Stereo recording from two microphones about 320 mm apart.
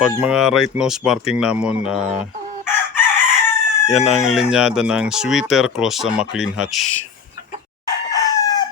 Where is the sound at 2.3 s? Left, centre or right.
Right.